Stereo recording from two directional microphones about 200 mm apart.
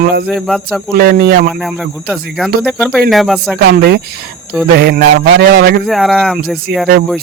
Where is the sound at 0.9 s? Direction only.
50° right (ahead or behind).